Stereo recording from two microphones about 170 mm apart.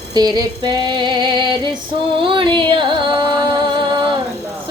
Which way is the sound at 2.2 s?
30° right (ahead or behind).